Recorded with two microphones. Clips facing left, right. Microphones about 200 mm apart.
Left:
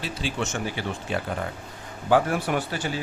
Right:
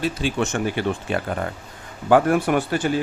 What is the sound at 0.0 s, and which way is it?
Speech, 55° right (ahead or behind).